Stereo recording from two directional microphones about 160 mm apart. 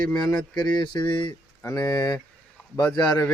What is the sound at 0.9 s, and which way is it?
Speech, 30° left (ahead or behind).